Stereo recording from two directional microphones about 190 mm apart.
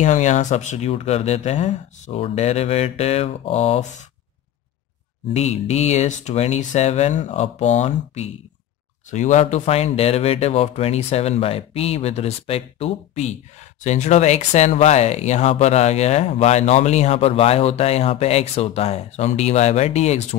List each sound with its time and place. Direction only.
0.0 s speech: 40° left (ahead or behind)
5.3 s speech: 35° left (ahead or behind)